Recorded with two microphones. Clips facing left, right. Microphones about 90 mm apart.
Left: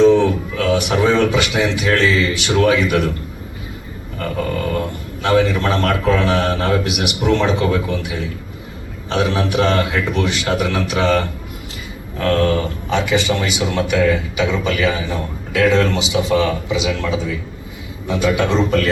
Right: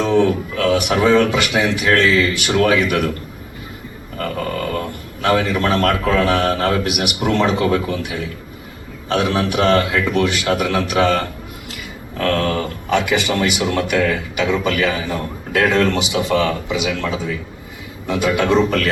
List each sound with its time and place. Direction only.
0.0 s a sound: 45° right (ahead or behind)
2.0 s a man's voice: 45° right (ahead or behind)
5.2 s a man's voice: 45° right (ahead or behind)
12.9 s a man's voice: 55° right (ahead or behind)